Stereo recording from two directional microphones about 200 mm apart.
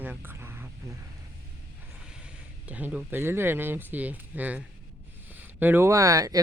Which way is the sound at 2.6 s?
5° right (ahead or behind).